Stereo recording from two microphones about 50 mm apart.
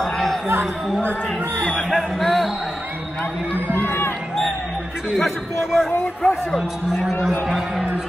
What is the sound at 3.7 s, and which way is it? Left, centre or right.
Run, left.